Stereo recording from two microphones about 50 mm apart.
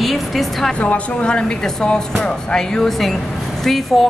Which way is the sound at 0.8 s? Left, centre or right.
Left.